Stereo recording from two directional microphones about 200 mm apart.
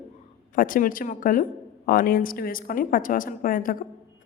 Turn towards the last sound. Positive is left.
turn(degrees=45)  # may be behind; listen again after turning